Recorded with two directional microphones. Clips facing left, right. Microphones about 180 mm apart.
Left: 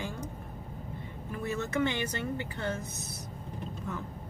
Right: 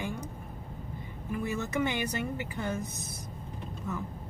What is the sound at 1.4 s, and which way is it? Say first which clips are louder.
Speech: left 1 dB; 15° right (ahead or behind).